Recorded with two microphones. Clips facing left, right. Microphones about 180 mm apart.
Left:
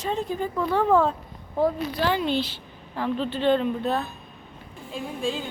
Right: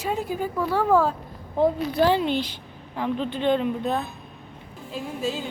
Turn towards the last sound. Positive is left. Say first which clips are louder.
# even
turn(degrees=-5)  # may be behind; listen again after turning